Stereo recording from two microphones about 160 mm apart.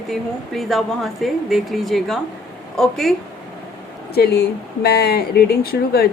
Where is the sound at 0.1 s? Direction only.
Centre (ahead or behind).